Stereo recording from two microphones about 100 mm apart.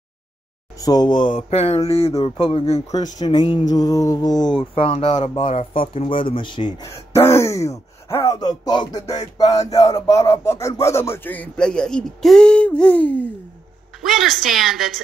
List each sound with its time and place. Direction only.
0.7 s speech: 40° left (ahead or behind)
1.5 s mantra: 90° left
1.9 s speech: 80° left
2.2 s speech: 60° left (ahead or behind); by 2.8 s 75° left (ahead or behind)
2.9 s a sound: 45° left (ahead or behind)
4.6 s speech: 70° left (ahead or behind); by 6.7 s 55° left (ahead or behind)
6.8 s speech: 30° left (ahead or behind)
8.4 s a sound: 40° left (ahead or behind)
10.8 s speech: 25° left (ahead or behind)
14.0 s a woman's voice: centre (ahead or behind)